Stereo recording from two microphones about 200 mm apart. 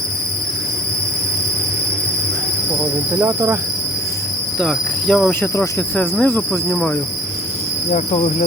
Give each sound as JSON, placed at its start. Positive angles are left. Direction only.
{"t": 3.2, "sound": "speech", "side_deg": -10}
{"t": 4.6, "sound": "insect", "side_deg": 5}
{"t": 7.9, "sound": "cricket", "side_deg": 30}